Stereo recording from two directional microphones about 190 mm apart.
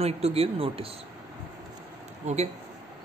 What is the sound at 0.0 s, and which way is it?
Speech, 30° right (ahead or behind).